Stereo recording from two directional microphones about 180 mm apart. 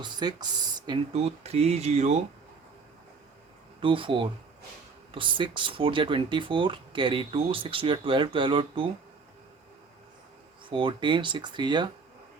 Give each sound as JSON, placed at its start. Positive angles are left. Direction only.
{"t": 0.0, "sound": "speech", "side_deg": -25}
{"t": 1.1, "sound": "speech", "side_deg": -35}
{"t": 3.8, "sound": "speech", "side_deg": -30}
{"t": 10.7, "sound": "speech", "side_deg": -25}